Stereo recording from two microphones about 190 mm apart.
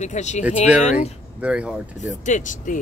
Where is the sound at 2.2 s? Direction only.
40° left (ahead or behind).